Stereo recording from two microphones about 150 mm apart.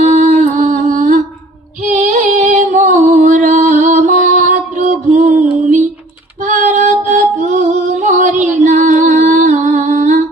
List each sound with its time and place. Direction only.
0.0 s music: 50° right (ahead or behind)